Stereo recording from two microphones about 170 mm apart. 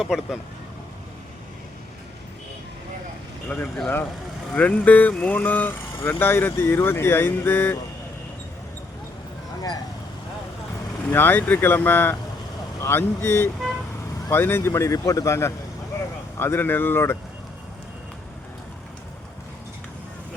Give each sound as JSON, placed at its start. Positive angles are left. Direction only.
{"t": 0.0, "sound": "speech", "side_deg": 0}
{"t": 3.5, "sound": "speech", "side_deg": 10}
{"t": 11.1, "sound": "speech", "side_deg": 10}